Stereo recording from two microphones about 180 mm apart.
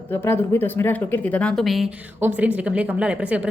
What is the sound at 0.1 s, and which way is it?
A woman's voice, 10° left (ahead or behind).